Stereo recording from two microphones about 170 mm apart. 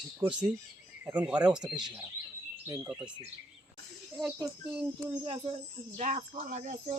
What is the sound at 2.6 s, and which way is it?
Speech, 15° right (ahead or behind).